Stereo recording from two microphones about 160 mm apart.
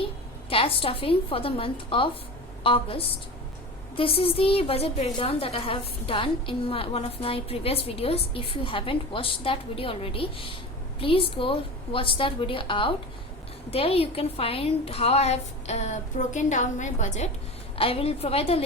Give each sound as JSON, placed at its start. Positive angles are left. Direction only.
{"t": 0.5, "sound": "a woman's voice", "side_deg": 35}
{"t": 17.7, "sound": "a woman's voice", "side_deg": 35}